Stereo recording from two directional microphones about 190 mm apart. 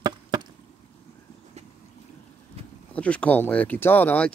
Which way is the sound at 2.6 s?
35° right (ahead or behind).